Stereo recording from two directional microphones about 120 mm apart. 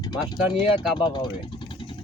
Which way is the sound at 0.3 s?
35° left (ahead or behind).